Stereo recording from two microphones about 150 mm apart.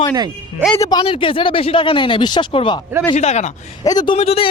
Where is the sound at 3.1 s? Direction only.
45° left (ahead or behind).